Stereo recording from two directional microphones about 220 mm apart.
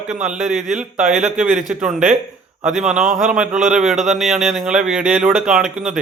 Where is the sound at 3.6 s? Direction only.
35° right (ahead or behind).